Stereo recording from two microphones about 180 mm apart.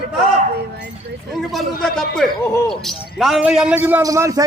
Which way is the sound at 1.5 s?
Centre (ahead or behind).